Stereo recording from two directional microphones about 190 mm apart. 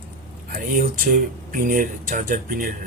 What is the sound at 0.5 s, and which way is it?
Speech, 45° right (ahead or behind).